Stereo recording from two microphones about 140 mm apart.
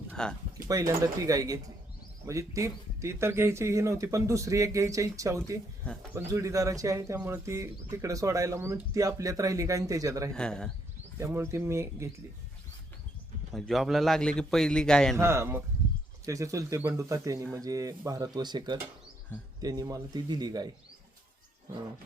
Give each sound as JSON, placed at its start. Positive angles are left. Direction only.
{"t": 0.1, "sound": "a sound", "side_deg": 5}
{"t": 0.5, "sound": "speech", "side_deg": -25}
{"t": 5.8, "sound": "speech", "side_deg": 5}
{"t": 6.1, "sound": "speech", "side_deg": -20}
{"t": 10.3, "sound": "a man's voice", "side_deg": 5}
{"t": 11.2, "sound": "speech", "side_deg": -15}
{"t": 13.5, "sound": "a man's voice", "side_deg": 0}
{"t": 15.1, "sound": "speech", "side_deg": -20}